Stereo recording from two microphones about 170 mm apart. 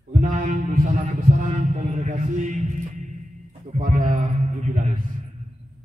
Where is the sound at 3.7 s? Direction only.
50° right (ahead or behind).